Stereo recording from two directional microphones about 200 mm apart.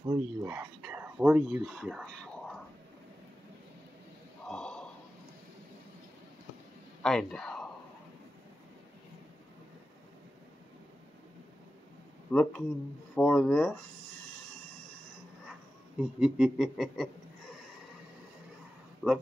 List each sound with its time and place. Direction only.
0.0 s speech: 10° right (ahead or behind)
4.5 s a sound: 5° left (ahead or behind)
7.0 s speech: 5° left (ahead or behind)
12.3 s speech: 5° left (ahead or behind)
16.0 s speech: 5° right (ahead or behind)
19.0 s speech: 5° right (ahead or behind)